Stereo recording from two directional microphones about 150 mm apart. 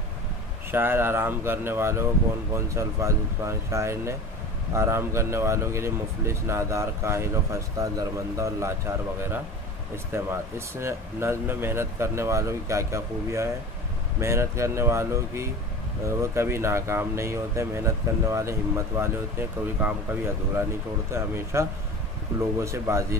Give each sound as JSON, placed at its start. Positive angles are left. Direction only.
{"t": 0.7, "sound": "speech", "side_deg": -15}
{"t": 21.1, "sound": "speech", "side_deg": -20}